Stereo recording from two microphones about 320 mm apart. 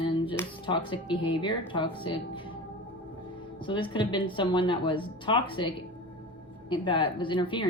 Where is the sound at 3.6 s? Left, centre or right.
Centre.